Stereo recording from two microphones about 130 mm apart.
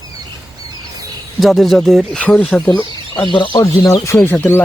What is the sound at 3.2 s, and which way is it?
Speech, 40° left (ahead or behind).